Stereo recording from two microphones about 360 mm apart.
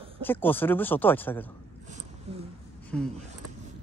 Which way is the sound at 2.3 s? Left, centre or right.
Centre.